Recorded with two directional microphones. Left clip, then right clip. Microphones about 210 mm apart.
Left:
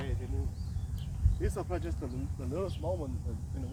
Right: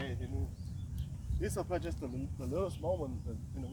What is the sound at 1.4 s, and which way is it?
Speech, 40° right (ahead or behind).